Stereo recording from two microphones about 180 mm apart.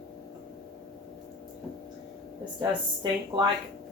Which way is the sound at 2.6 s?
25° right (ahead or behind).